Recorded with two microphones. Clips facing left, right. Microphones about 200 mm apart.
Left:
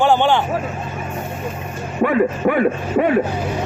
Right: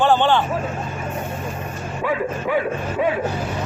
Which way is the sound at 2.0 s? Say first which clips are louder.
Left 7 dB; 60° left (ahead or behind).